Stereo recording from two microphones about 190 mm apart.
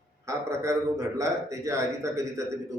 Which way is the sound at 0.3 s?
15° right (ahead or behind).